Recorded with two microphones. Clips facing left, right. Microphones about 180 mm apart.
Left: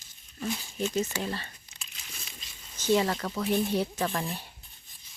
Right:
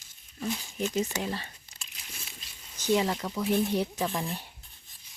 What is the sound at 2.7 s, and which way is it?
Speech, 15° right (ahead or behind).